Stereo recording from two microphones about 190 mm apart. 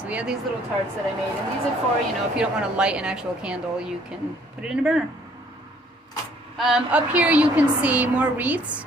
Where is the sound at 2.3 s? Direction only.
5° right (ahead or behind).